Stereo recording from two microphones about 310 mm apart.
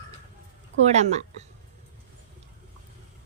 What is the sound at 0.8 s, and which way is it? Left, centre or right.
Speech, right.